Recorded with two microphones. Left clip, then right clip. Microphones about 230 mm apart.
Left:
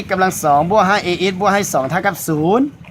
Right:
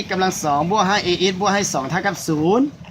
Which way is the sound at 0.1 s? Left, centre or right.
Left.